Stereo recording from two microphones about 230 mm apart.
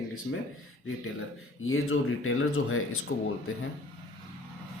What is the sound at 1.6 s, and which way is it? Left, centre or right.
Speech, left.